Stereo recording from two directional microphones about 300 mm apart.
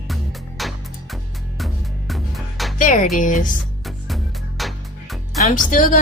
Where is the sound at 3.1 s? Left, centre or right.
Left.